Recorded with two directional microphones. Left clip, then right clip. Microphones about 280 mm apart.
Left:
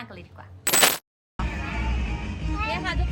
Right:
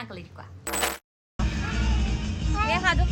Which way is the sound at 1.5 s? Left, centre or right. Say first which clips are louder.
Right 1 dB; left.